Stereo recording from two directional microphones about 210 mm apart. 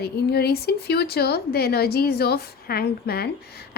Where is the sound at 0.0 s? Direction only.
50° left (ahead or behind).